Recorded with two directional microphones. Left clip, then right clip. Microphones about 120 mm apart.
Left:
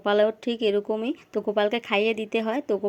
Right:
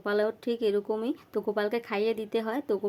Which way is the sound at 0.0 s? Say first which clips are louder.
Left 6 dB; 20° left (ahead or behind).